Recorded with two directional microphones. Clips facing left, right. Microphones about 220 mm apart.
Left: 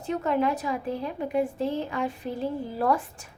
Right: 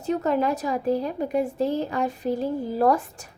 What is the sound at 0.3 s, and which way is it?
A woman's voice, 40° right (ahead or behind).